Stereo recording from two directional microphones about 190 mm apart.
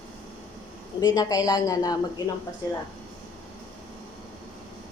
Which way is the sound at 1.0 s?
20° left (ahead or behind).